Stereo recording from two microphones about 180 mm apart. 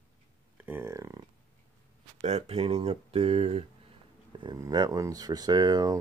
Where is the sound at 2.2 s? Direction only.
35° right (ahead or behind).